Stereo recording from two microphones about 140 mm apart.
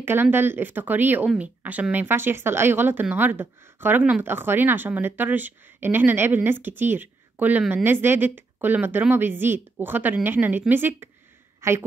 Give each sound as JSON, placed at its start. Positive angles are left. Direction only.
{"t": 0.0, "sound": "a woman's voice", "side_deg": -15}